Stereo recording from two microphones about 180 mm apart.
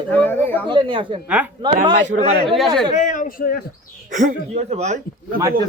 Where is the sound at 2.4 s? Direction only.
Centre (ahead or behind).